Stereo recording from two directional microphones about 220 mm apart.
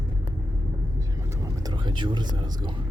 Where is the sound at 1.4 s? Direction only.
15° right (ahead or behind).